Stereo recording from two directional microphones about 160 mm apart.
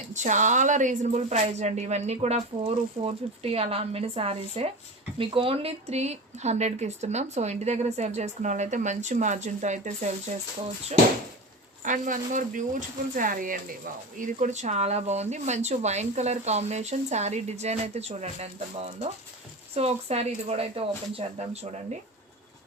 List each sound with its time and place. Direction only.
0.1 s speech: 50° right (ahead or behind)
11.8 s speech: 55° right (ahead or behind)